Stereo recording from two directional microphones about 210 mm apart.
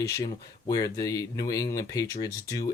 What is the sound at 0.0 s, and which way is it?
Speech, 15° left (ahead or behind).